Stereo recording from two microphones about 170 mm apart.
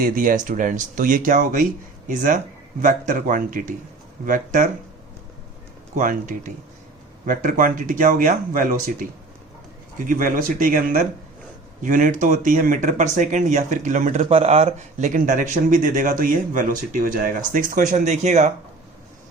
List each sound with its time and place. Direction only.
0.0 s speech: 55° right (ahead or behind)
6.0 s speech: 50° right (ahead or behind)
10.1 s speech: 50° right (ahead or behind)